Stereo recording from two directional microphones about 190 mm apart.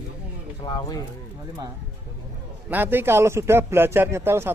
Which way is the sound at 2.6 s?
10° right (ahead or behind).